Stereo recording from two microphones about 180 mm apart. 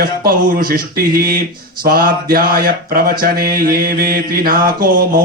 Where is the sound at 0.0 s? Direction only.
55° right (ahead or behind).